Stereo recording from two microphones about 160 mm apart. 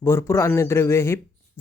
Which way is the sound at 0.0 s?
15° left (ahead or behind).